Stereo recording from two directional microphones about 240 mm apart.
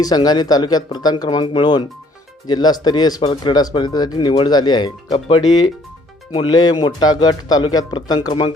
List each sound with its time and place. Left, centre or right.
0.0 s speech: centre